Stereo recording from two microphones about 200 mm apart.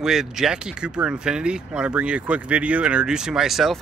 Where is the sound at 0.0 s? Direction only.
Centre (ahead or behind).